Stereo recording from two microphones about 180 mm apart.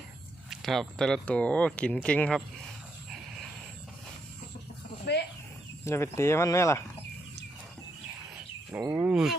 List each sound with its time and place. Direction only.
0.5 s speech: centre (ahead or behind)
5.1 s chicken: 70° left (ahead or behind)
5.8 s speech: 15° left (ahead or behind)
8.7 s speech: 15° right (ahead or behind)